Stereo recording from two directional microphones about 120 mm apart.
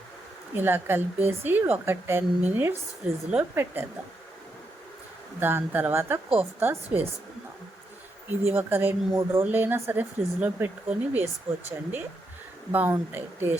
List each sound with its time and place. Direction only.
0.5 s speech: 20° right (ahead or behind)
5.4 s speech: 15° right (ahead or behind)
8.4 s speech: 15° right (ahead or behind)